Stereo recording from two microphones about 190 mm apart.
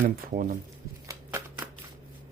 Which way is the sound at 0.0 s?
45° right (ahead or behind).